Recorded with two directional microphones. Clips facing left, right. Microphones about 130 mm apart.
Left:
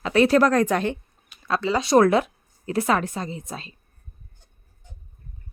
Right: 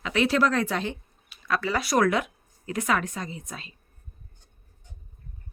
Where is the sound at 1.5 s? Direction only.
25° left (ahead or behind).